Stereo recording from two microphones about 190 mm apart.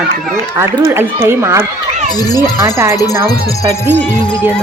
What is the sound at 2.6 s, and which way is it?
Speech, 15° right (ahead or behind).